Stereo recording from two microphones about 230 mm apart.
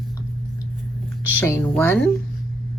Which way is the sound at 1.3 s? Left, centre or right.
Centre.